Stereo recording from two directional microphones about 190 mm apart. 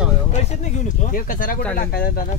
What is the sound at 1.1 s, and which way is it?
Speech, 45° left (ahead or behind).